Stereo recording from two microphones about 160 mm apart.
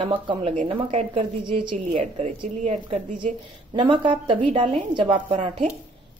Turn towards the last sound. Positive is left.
turn(degrees=-35)  # may be behind; listen again after turning